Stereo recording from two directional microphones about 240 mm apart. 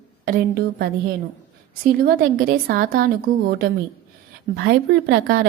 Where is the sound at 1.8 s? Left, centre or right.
Right.